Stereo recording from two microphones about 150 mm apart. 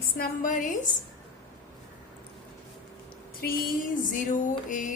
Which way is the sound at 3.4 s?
70° left (ahead or behind).